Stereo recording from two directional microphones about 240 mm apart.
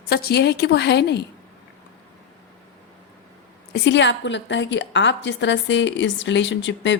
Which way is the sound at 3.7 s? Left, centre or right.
Left.